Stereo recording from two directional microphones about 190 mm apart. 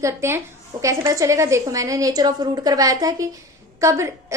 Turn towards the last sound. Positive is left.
turn(degrees=-15)  # may be behind; listen again after turning